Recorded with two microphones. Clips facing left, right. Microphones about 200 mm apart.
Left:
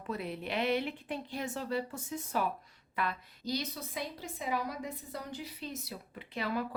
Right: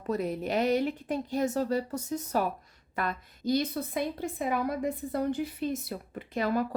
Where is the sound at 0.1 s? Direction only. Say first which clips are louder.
Right 7 dB; 40° right (ahead or behind).